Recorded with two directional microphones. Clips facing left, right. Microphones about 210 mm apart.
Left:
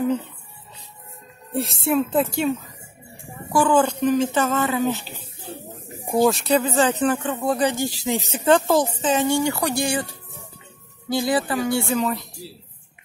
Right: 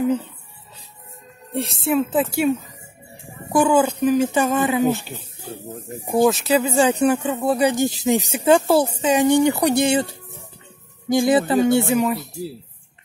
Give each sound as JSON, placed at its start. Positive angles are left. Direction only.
{"t": 1.5, "sound": "a woman's voice", "side_deg": 0}
{"t": 3.5, "sound": "speech", "side_deg": -10}
{"t": 6.2, "sound": "speech", "side_deg": -5}
{"t": 11.2, "sound": "speech", "side_deg": -25}